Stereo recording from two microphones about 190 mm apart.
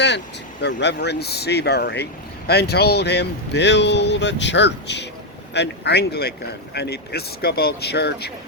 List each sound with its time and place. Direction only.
0.6 s speech: 65° left (ahead or behind)